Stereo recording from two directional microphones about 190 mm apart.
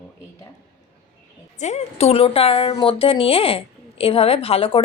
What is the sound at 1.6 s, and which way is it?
A woman's voice, 35° left (ahead or behind).